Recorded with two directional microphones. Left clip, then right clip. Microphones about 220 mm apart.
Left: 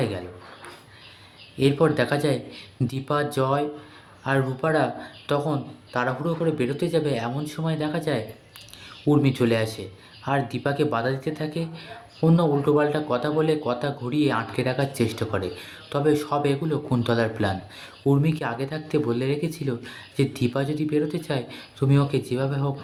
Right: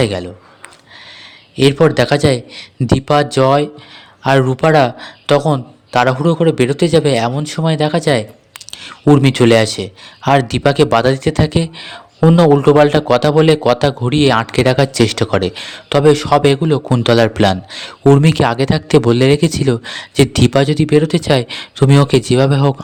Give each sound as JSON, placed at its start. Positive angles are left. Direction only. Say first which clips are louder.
{"t": 0.0, "sound": "speech", "louder": "right 12 dB", "side_deg": -50}
{"t": 1.5, "sound": "speech", "louder": "right 10 dB", "side_deg": -45}